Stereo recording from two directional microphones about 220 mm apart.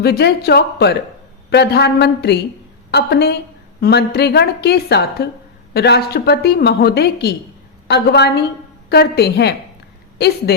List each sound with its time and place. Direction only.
0.0 s speech: 45° left (ahead or behind)